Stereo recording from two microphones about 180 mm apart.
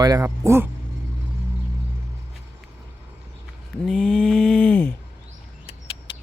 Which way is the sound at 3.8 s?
5° left (ahead or behind).